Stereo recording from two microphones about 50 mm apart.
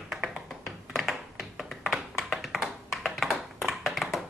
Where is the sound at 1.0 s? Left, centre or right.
Centre.